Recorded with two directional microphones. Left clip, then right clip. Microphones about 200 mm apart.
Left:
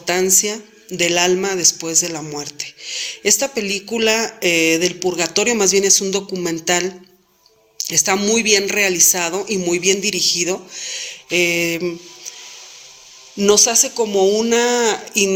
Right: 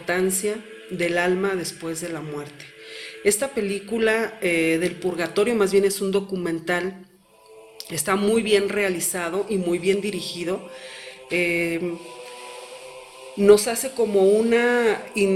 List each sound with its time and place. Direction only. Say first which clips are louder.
0.0 s a man's voice: left 6 dB; 35° left (ahead or behind)
13.4 s a man's voice: left 2 dB; 30° left (ahead or behind)